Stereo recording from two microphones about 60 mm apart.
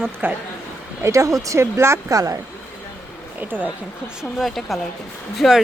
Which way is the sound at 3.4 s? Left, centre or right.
Right.